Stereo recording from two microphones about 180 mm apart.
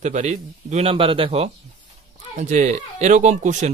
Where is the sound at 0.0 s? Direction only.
40° right (ahead or behind).